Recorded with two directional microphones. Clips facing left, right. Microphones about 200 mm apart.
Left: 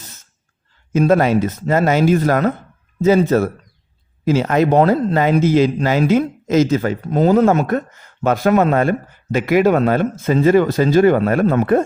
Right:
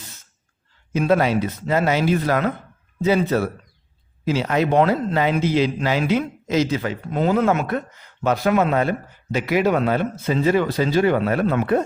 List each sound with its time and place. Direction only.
0.9 s speech: 45° left (ahead or behind)